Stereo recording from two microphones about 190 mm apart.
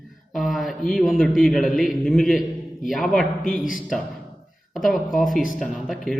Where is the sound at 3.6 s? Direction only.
45° left (ahead or behind).